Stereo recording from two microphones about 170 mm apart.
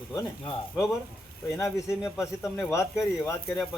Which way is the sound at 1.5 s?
15° left (ahead or behind).